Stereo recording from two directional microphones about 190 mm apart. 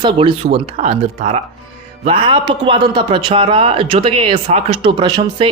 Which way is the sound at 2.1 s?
25° right (ahead or behind).